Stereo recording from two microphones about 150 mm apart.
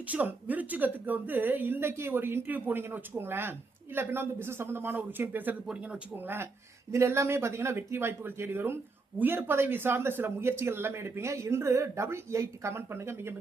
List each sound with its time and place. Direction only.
0.1 s speech: 10° right (ahead or behind)